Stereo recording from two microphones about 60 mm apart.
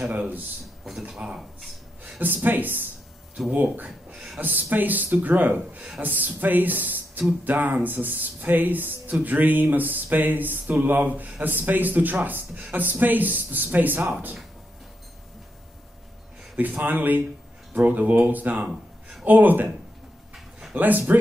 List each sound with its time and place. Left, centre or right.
0.1 s speech: right
1.1 s speech: centre
2.1 s speech: right
16.5 s speech: right
20.7 s speech: right